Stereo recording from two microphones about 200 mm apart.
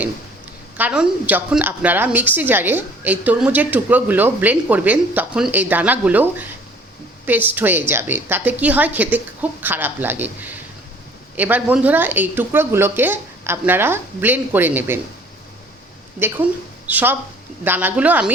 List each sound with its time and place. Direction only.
0.8 s a woman's voice: 5° right (ahead or behind)
16.2 s a woman's voice: 10° right (ahead or behind)